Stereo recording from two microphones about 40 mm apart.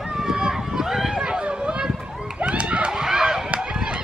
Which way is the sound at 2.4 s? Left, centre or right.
Right.